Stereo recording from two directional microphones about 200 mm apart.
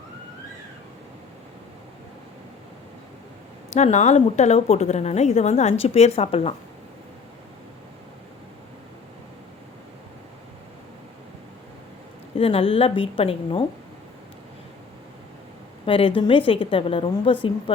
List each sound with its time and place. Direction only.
3.8 s a woman's voice: 35° left (ahead or behind)
12.4 s a woman's voice: 30° left (ahead or behind)
15.9 s a woman's voice: 25° left (ahead or behind)